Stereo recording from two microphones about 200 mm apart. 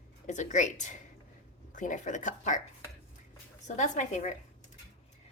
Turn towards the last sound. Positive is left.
turn(degrees=40)  # may be behind; listen again after turning